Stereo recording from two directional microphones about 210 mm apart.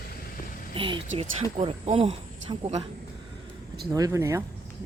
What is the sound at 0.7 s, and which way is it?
Speech, 25° right (ahead or behind).